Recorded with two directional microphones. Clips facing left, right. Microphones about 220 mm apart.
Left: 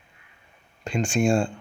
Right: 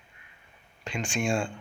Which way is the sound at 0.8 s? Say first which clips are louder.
Left 7 dB; 40° left (ahead or behind).